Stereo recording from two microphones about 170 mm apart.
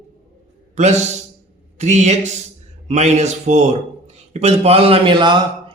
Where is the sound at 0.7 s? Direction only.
40° right (ahead or behind).